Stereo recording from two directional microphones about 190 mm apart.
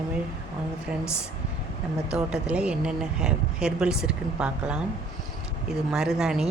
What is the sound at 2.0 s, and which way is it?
Speech, 5° right (ahead or behind).